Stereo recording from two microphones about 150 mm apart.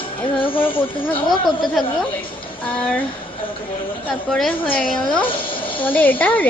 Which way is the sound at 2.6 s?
10° left (ahead or behind).